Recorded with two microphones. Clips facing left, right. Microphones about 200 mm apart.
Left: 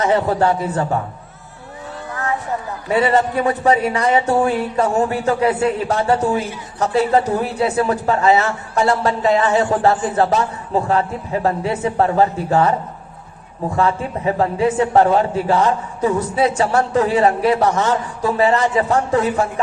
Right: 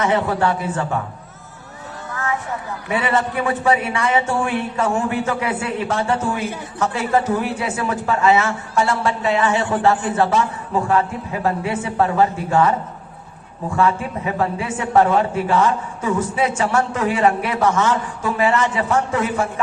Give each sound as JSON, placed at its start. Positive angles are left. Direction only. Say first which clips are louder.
{"t": 0.0, "sound": "a man's voice", "louder": "left 2 dB", "side_deg": 35}
{"t": 2.9, "sound": "a man's voice", "louder": "left 4 dB", "side_deg": 40}